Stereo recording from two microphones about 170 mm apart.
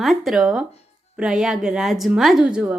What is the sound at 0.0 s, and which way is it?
A woman's voice, centre (ahead or behind).